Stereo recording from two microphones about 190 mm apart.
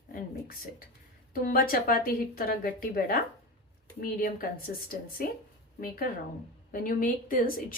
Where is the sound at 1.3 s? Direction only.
50° left (ahead or behind).